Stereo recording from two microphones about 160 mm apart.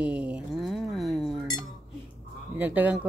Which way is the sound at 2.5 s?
10° right (ahead or behind).